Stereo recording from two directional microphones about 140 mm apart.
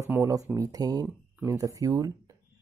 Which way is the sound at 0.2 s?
25° right (ahead or behind).